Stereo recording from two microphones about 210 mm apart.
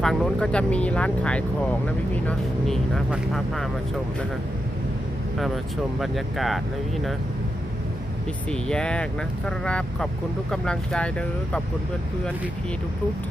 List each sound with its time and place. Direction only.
0.0 s speech: centre (ahead or behind)
6.0 s speech: centre (ahead or behind)
8.4 s speech: 5° left (ahead or behind)